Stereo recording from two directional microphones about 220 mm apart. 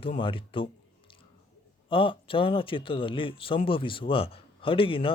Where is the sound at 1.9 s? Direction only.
25° left (ahead or behind).